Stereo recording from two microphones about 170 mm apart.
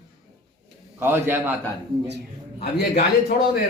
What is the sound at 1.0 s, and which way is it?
Speech, 15° right (ahead or behind).